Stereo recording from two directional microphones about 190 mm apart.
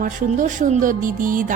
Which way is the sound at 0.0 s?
45° right (ahead or behind).